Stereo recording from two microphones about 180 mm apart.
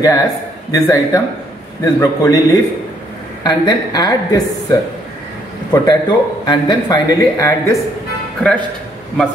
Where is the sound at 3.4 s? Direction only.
25° left (ahead or behind).